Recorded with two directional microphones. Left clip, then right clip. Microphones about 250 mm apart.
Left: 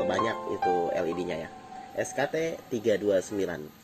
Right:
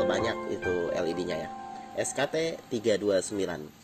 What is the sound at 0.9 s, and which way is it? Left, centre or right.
Speech, centre.